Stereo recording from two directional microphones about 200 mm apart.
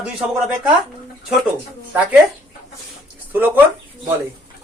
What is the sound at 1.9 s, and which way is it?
Speech, 5° right (ahead or behind).